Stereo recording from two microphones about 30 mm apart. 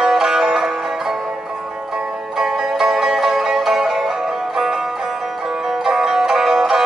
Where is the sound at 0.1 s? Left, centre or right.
Centre.